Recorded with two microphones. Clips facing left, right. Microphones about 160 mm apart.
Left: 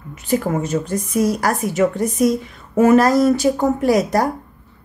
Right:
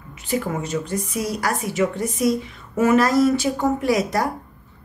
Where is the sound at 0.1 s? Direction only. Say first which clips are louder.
Left 5 dB; 45° left (ahead or behind).